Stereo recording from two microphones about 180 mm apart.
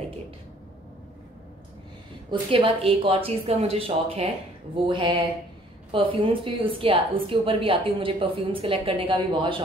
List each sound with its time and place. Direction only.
2.5 s a woman's voice: 30° right (ahead or behind)